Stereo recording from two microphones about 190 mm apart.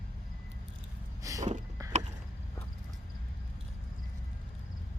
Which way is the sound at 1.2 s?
15° right (ahead or behind).